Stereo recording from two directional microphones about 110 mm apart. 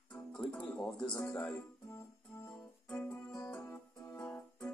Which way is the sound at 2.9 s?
30° left (ahead or behind).